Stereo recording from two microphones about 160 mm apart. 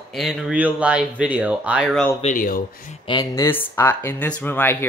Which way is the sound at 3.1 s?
25° left (ahead or behind).